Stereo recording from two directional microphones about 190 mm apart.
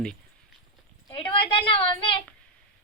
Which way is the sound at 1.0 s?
25° left (ahead or behind).